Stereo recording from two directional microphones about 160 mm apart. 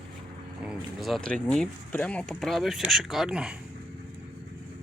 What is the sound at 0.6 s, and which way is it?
Speech, 5° right (ahead or behind).